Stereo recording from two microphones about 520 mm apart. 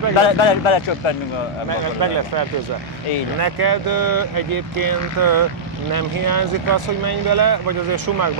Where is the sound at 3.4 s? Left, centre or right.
Right.